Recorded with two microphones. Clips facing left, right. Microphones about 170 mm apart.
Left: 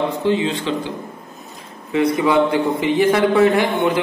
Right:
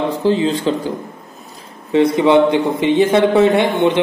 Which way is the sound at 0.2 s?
35° right (ahead or behind).